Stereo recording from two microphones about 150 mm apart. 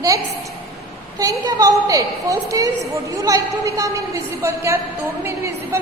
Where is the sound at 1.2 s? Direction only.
25° right (ahead or behind).